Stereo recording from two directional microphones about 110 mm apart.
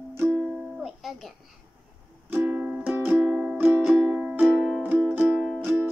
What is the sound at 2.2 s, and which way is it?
Music, 15° right (ahead or behind).